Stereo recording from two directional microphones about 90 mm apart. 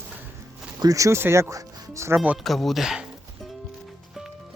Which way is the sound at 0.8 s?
40° right (ahead or behind).